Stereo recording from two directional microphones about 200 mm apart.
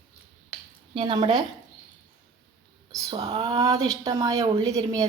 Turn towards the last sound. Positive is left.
turn(degrees=-20)  # may be behind; listen again after turning